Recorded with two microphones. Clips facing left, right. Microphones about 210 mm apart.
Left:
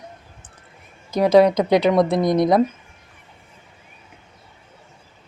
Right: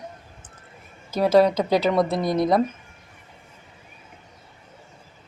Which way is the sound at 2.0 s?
15° left (ahead or behind).